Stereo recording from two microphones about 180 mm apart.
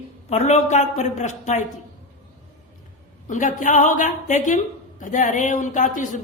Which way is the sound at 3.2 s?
45° left (ahead or behind).